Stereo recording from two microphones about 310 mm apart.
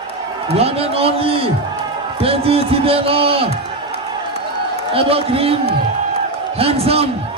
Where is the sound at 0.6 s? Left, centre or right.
Centre.